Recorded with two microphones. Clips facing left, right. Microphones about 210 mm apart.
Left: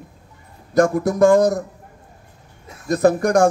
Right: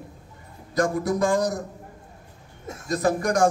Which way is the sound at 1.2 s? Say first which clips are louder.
Left 11 dB; 60° left (ahead or behind).